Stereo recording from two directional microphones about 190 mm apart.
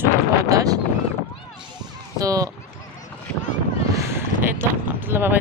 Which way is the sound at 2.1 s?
20° right (ahead or behind).